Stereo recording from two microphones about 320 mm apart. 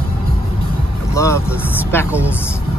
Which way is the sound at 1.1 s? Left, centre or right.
Centre.